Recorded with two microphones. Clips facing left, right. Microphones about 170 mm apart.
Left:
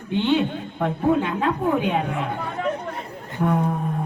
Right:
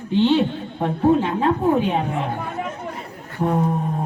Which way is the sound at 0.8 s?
30° right (ahead or behind).